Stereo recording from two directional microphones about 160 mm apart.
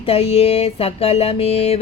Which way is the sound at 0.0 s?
40° left (ahead or behind).